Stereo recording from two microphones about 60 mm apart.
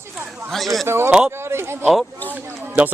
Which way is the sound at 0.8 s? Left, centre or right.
Right.